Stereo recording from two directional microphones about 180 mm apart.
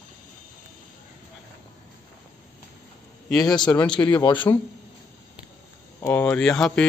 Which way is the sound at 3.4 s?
25° left (ahead or behind).